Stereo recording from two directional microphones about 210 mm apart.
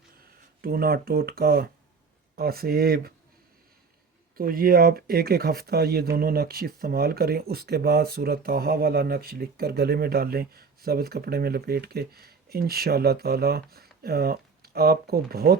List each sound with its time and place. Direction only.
0.6 s speech: 45° right (ahead or behind)
4.4 s speech: 45° right (ahead or behind)